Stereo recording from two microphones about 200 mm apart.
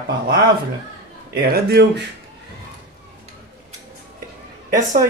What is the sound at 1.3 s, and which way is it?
Speech, 50° right (ahead or behind).